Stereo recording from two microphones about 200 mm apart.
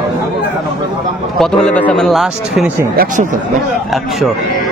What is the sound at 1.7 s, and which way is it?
Speech, 5° left (ahead or behind).